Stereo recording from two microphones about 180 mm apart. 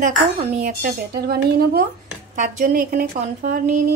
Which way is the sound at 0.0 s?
40° right (ahead or behind).